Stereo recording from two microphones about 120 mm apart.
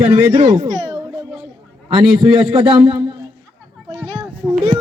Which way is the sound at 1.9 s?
40° right (ahead or behind).